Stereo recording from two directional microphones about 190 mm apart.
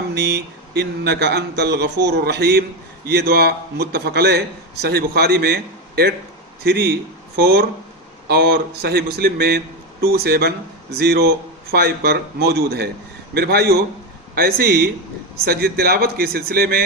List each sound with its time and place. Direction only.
0.1 s speech: 60° right (ahead or behind)